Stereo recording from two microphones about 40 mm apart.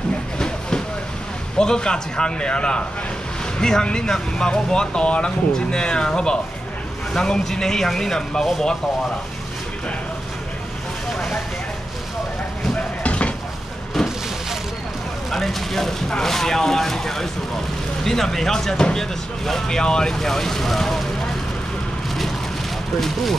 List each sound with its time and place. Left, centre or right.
0.4 s a sound: left
1.6 s a man's voice: left
11.1 s vehicle: centre
13.0 s a sound: left
14.0 s a sound: centre
15.3 s speech: centre
19.8 s a man's voice: centre
20.2 s speech: centre
22.9 s speech: centre